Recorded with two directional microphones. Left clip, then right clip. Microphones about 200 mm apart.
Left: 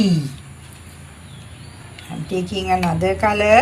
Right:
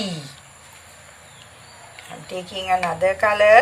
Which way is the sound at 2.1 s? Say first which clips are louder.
Left 5 dB; 20° right (ahead or behind).